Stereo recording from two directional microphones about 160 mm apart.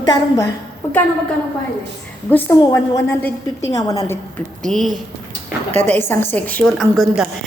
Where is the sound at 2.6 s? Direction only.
20° left (ahead or behind).